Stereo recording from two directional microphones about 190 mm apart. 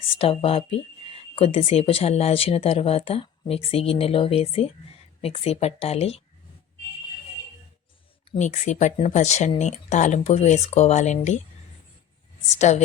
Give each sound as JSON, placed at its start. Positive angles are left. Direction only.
{"t": 0.1, "sound": "speech", "side_deg": 30}
{"t": 8.4, "sound": "speech", "side_deg": 40}
{"t": 12.5, "sound": "speech", "side_deg": 35}